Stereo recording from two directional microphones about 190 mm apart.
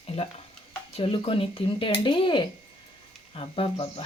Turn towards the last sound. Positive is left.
turn(degrees=30)  # may be behind; listen again after turning